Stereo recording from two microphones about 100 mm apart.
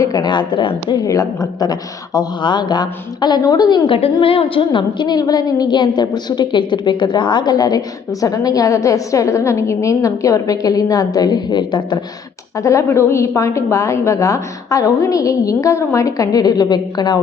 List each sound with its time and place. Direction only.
0.0 s a woman's voice: 45° left (ahead or behind)
1.0 s a woman's voice: 35° left (ahead or behind)
3.8 s a woman's voice: 60° left (ahead or behind)
12.6 s a woman's voice: 30° left (ahead or behind)